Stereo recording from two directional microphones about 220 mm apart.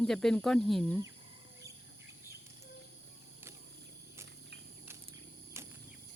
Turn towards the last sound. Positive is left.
turn(degrees=-10)  # may be behind; listen again after turning